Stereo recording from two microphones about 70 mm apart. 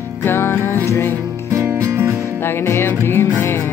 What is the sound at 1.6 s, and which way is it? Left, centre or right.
Music, right.